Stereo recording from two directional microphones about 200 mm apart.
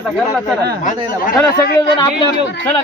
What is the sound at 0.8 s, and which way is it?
Speech, 45° left (ahead or behind).